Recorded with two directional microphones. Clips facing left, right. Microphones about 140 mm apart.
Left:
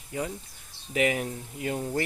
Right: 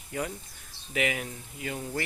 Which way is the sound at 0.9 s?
35° left (ahead or behind).